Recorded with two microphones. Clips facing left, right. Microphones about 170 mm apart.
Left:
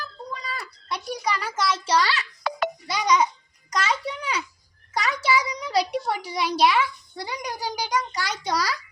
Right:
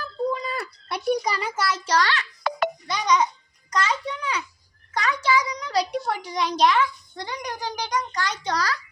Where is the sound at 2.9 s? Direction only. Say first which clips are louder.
Left 1 dB; 10° left (ahead or behind).